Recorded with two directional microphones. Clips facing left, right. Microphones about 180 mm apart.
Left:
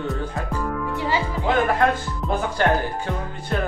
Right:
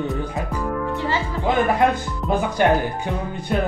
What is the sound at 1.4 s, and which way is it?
Speech, 15° right (ahead or behind).